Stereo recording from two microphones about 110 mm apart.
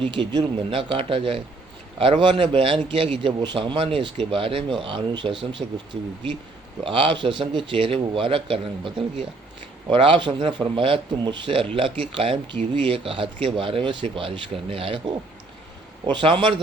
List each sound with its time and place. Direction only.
0.0 s speech: 50° right (ahead or behind)
5.6 s speech: 70° right (ahead or behind)
6.8 s speech: 50° right (ahead or behind)
16.2 s speech: 50° right (ahead or behind)